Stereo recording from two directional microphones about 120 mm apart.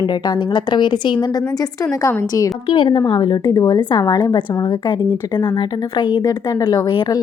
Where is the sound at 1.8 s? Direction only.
20° left (ahead or behind).